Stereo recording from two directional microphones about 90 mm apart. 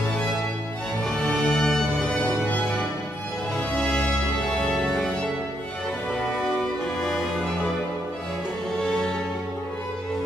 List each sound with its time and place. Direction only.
1.0 s music: 5° left (ahead or behind)
3.5 s music: 10° left (ahead or behind)
7.0 s music: 10° left (ahead or behind)